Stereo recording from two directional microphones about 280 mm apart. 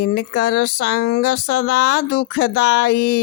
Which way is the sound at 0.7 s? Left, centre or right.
Left.